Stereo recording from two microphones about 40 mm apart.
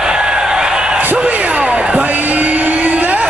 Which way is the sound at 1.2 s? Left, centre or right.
Right.